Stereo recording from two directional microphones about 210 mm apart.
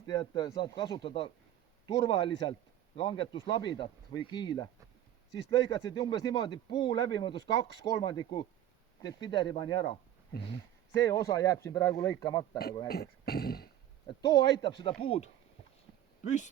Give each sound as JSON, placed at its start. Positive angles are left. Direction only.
{"t": 0.0, "sound": "speech", "side_deg": 20}
{"t": 12.9, "sound": "speech", "side_deg": 50}
{"t": 14.2, "sound": "speech", "side_deg": 20}